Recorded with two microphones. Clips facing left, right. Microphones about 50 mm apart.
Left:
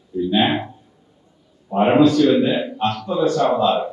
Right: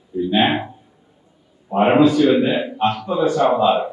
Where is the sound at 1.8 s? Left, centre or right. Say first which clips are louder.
Even; centre.